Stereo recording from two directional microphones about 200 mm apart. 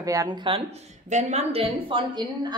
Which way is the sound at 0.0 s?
15° right (ahead or behind).